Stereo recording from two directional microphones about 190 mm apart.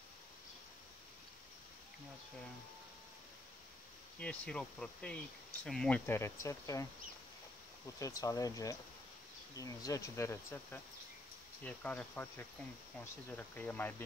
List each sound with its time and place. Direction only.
4.2 s speech: 5° left (ahead or behind)